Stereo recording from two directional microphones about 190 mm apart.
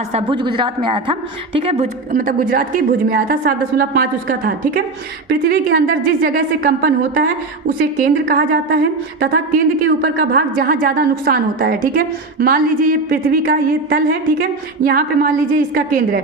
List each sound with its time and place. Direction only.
0.1 s a woman's voice: 30° right (ahead or behind)
2.1 s a woman's voice: 45° right (ahead or behind)